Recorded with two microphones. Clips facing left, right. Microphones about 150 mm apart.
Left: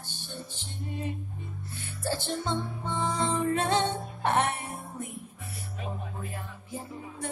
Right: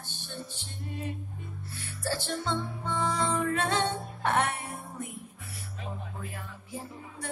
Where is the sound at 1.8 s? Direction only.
20° left (ahead or behind).